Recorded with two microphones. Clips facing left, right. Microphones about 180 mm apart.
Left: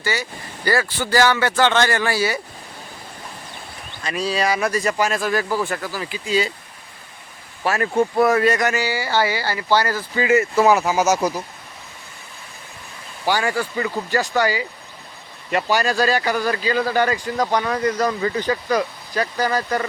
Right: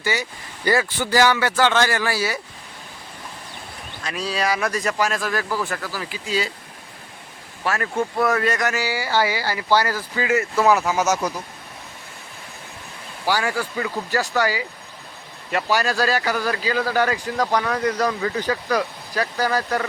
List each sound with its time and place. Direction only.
0.0 s speech: 15° right (ahead or behind); by 2.4 s centre (ahead or behind)
4.0 s speech: centre (ahead or behind)
5.5 s speech: 25° left (ahead or behind)
6.0 s speech: centre (ahead or behind)
7.7 s speech: 15° left (ahead or behind)
8.4 s speech: centre (ahead or behind)
10.2 s speech: 5° left (ahead or behind)
13.2 s speech: 5° right (ahead or behind)